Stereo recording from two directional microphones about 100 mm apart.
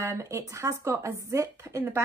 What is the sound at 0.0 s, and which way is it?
Speech, 30° right (ahead or behind).